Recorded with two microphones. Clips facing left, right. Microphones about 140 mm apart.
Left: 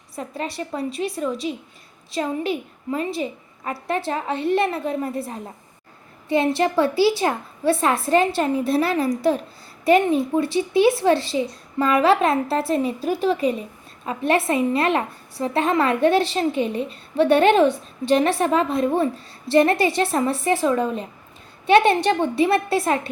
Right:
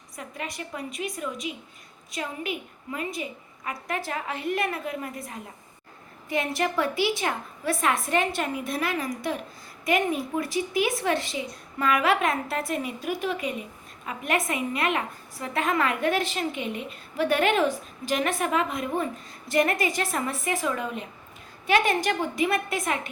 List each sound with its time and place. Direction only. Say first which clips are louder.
0.2 s speech: left 7 dB; 30° left (ahead or behind)